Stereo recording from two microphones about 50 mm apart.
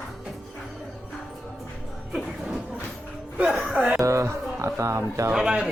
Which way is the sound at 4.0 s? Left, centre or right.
Right.